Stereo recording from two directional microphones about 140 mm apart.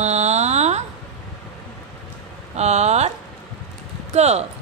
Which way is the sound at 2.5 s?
50° right (ahead or behind).